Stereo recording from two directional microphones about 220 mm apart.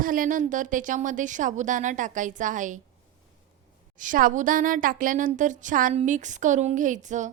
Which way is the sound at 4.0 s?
35° right (ahead or behind).